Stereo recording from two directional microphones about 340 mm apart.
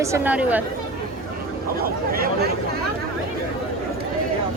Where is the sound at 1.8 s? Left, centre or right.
Right.